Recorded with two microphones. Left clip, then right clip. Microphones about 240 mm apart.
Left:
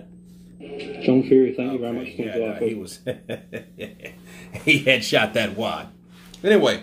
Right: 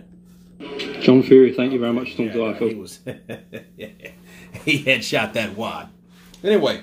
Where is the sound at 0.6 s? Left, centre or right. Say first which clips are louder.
Right 5 dB; right.